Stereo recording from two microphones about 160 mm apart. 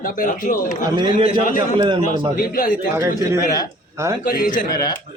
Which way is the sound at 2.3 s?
65° left (ahead or behind).